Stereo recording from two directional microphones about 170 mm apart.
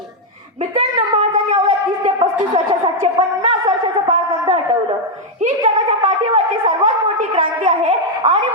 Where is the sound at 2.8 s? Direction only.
30° right (ahead or behind).